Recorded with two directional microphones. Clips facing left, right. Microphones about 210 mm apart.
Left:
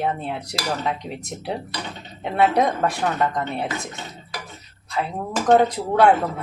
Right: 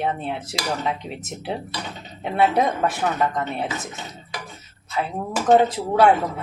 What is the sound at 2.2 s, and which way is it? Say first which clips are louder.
Speech: left 1 dB; centre (ahead or behind).